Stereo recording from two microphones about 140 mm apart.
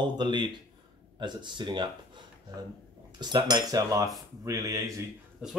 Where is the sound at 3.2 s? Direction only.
30° right (ahead or behind).